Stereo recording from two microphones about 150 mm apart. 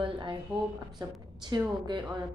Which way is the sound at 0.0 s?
35° right (ahead or behind).